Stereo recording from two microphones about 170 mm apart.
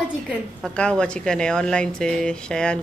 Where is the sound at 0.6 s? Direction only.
5° left (ahead or behind).